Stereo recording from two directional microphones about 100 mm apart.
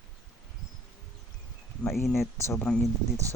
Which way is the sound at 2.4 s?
25° left (ahead or behind).